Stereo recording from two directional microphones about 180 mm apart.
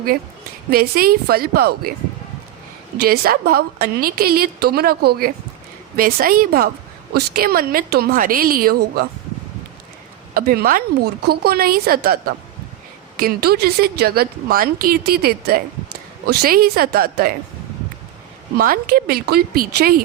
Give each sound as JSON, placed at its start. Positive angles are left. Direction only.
{"t": 0.7, "sound": "a woman's voice", "side_deg": -55}
{"t": 3.0, "sound": "a woman's voice", "side_deg": -60}
{"t": 10.3, "sound": "a woman's voice", "side_deg": -60}
{"t": 18.5, "sound": "a woman's voice", "side_deg": -55}